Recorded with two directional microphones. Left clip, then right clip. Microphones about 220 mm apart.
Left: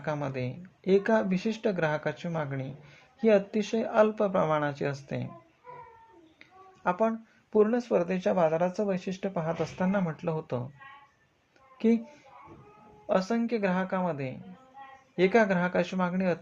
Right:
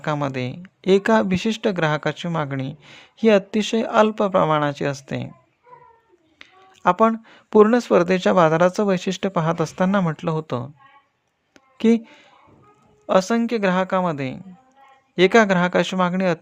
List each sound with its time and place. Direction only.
0.0 s speech: 40° right (ahead or behind)
6.4 s speech: 45° right (ahead or behind)
11.8 s speech: 40° right (ahead or behind)
13.1 s speech: 40° right (ahead or behind)